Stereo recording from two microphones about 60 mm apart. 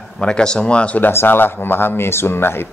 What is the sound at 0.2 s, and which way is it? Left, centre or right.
Speech, centre.